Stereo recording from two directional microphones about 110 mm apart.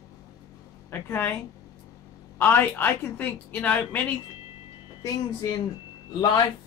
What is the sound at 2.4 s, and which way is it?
Speech, 20° left (ahead or behind).